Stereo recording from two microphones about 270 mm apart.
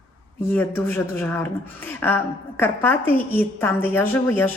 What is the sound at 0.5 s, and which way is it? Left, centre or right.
Speech, centre.